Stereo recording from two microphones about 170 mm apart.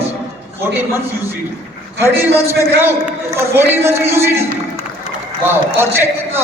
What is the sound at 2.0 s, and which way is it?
Speech, 15° right (ahead or behind).